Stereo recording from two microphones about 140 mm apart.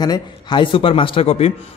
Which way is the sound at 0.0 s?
30° left (ahead or behind).